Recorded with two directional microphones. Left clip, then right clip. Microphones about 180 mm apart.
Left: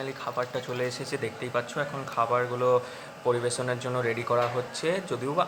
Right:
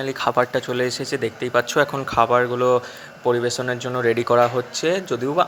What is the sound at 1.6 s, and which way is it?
Speech, 45° right (ahead or behind).